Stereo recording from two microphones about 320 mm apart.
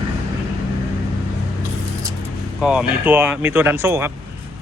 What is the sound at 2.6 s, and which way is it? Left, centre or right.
Speech, centre.